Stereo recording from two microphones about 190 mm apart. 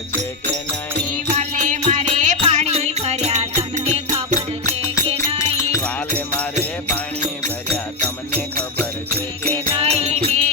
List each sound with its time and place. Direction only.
1.4 s music: 40° right (ahead or behind)
9.8 s music: 35° right (ahead or behind)